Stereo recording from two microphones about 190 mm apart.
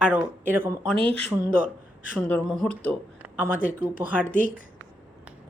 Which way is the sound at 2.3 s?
5° left (ahead or behind).